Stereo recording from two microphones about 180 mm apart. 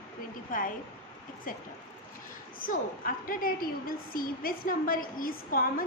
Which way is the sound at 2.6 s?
50° left (ahead or behind).